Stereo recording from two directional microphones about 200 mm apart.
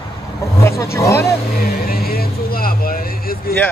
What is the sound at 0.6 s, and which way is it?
Speech, 15° left (ahead or behind).